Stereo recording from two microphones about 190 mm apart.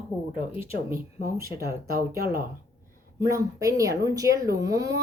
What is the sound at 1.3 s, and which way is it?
Speech, 15° right (ahead or behind).